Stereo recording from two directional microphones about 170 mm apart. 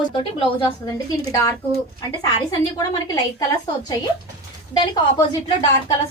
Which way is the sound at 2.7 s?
20° left (ahead or behind).